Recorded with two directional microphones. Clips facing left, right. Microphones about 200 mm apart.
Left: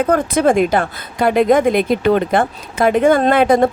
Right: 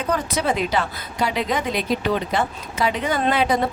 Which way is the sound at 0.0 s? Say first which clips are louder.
Left 9 dB; 55° left (ahead or behind).